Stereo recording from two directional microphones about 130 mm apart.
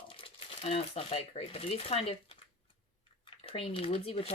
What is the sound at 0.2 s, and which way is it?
Speech, 45° left (ahead or behind).